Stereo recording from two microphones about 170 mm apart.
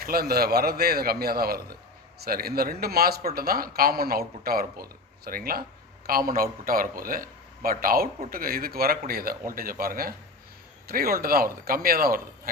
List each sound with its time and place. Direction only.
0.0 s a man's voice: 60° right (ahead or behind)